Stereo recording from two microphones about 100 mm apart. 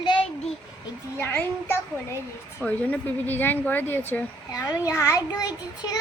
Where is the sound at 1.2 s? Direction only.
25° left (ahead or behind).